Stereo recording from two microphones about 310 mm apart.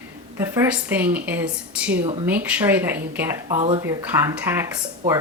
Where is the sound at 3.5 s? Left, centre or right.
Centre.